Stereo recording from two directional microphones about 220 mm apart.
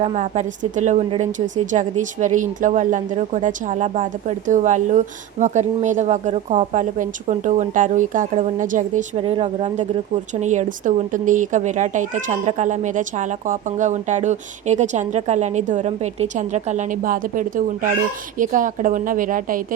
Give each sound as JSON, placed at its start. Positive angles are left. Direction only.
{"t": 0.0, "sound": "speech", "side_deg": -30}
{"t": 9.2, "sound": "a woman's voice", "side_deg": -25}